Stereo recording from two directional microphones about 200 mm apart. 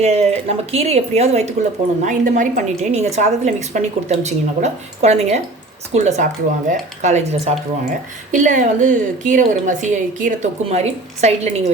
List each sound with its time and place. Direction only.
0.0 s a woman's voice: 30° right (ahead or behind)